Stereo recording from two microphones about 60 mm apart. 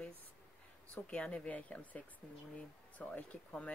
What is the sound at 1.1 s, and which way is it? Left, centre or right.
Speech, centre.